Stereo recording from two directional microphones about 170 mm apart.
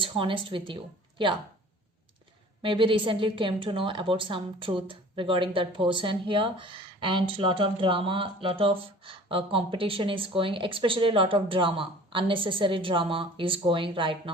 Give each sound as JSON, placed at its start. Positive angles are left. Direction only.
{"t": 0.0, "sound": "speech", "side_deg": -30}
{"t": 2.6, "sound": "a woman's voice", "side_deg": -30}